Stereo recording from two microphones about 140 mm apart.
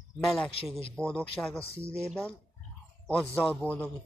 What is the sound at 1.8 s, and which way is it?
Speech, 20° right (ahead or behind).